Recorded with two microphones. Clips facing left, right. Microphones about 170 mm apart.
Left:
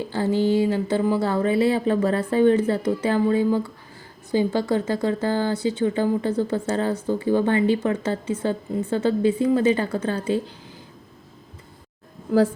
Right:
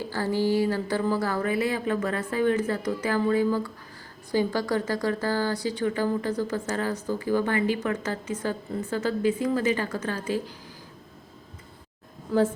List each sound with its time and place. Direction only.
0.1 s speech: 20° left (ahead or behind)